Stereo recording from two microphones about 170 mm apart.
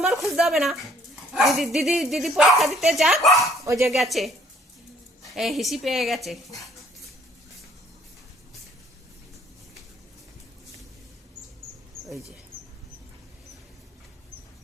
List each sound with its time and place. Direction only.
0.3 s speech: centre (ahead or behind)
3.6 s speech: 20° right (ahead or behind)
3.8 s speech: centre (ahead or behind)